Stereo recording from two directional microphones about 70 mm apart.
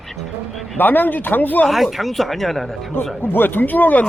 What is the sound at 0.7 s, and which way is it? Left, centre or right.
Speech, left.